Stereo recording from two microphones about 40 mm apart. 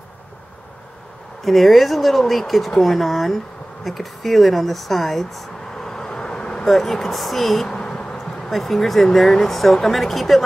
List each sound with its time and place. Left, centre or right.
1.4 s speech: centre
5.7 s vehicle: centre
6.6 s speech: centre
7.6 s a sound: centre
8.5 s speech: centre